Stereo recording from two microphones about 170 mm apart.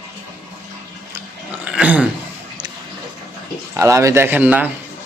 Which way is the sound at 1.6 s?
10° right (ahead or behind).